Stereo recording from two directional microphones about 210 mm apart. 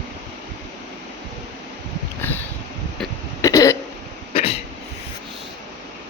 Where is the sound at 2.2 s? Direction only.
10° left (ahead or behind).